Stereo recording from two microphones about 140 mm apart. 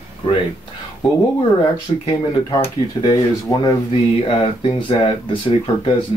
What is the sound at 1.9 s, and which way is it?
Speech, 40° left (ahead or behind).